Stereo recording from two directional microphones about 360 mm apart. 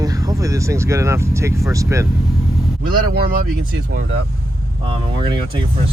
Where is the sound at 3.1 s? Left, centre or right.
Right.